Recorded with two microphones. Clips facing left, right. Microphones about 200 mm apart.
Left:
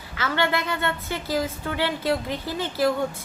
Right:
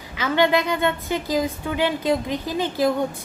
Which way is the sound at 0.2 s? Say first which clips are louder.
Right 5 dB; 15° right (ahead or behind).